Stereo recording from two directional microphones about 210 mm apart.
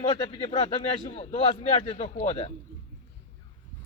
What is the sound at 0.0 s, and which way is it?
A man's voice, 25° left (ahead or behind).